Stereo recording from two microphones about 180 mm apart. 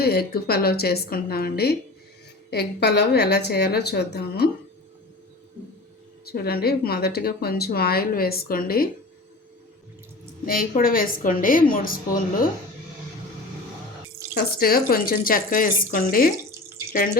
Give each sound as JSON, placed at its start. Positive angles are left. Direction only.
{"t": 0.0, "sound": "speech", "side_deg": 60}
{"t": 6.2, "sound": "speech", "side_deg": 60}
{"t": 10.4, "sound": "speech", "side_deg": 55}
{"t": 14.3, "sound": "speech", "side_deg": 55}